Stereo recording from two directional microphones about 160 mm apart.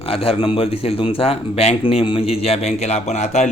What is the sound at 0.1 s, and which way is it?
A man's voice, 35° left (ahead or behind).